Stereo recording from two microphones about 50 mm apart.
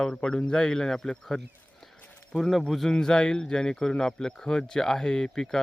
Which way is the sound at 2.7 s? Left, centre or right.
Centre.